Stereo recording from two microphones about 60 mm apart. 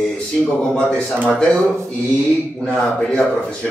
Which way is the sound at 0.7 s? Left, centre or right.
Centre.